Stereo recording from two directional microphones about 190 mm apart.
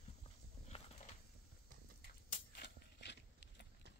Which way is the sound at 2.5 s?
60° left (ahead or behind).